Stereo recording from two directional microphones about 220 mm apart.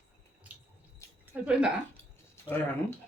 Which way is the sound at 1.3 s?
5° right (ahead or behind).